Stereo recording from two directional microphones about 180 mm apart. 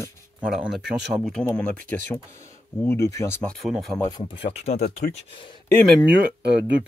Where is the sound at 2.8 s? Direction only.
15° left (ahead or behind).